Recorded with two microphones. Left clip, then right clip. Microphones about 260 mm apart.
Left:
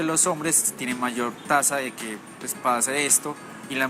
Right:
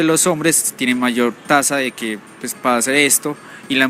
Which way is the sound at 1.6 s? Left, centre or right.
Right.